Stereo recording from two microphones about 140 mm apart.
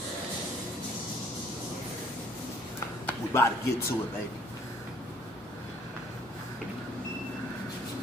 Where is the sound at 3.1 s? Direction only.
20° left (ahead or behind).